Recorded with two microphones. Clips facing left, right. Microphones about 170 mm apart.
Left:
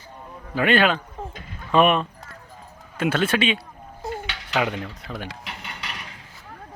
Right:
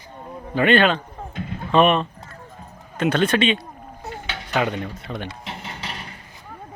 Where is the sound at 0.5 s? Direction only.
5° left (ahead or behind).